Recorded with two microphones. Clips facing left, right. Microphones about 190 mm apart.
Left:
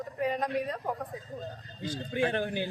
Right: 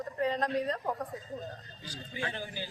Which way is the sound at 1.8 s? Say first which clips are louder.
Left 9 dB; 55° left (ahead or behind).